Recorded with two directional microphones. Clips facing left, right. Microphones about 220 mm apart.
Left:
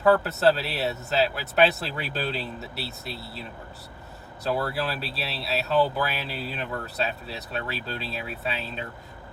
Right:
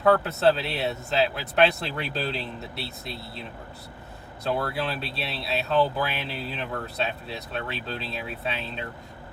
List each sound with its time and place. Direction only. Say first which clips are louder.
0.0 s speech: even; centre (ahead or behind)
4.4 s speech: even; centre (ahead or behind)